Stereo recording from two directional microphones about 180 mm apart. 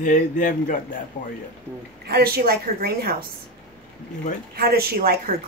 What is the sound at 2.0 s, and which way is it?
A woman's voice, 60° right (ahead or behind).